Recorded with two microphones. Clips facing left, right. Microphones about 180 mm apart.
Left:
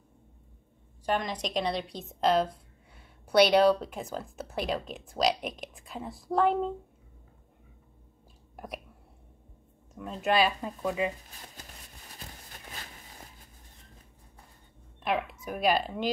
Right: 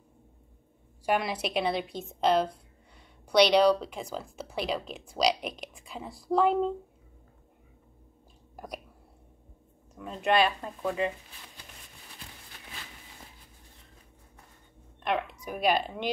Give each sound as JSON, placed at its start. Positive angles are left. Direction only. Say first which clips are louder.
{"t": 1.0, "sound": "a woman's voice", "louder": "right 2 dB", "side_deg": -10}
{"t": 8.5, "sound": "speech", "louder": "even", "side_deg": 0}
{"t": 9.9, "sound": "a woman's voice", "louder": "right 1 dB", "side_deg": 0}
{"t": 11.2, "sound": "a sound", "louder": "left 2 dB", "side_deg": 40}
{"t": 15.0, "sound": "speech", "louder": "even", "side_deg": 5}